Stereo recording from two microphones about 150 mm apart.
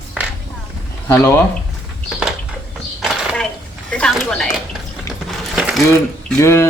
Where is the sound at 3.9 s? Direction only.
5° left (ahead or behind).